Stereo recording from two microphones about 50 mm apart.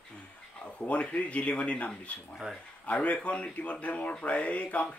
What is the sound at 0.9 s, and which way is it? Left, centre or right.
Speech, left.